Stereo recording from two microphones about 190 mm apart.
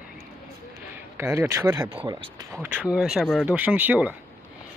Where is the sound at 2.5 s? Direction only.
10° right (ahead or behind).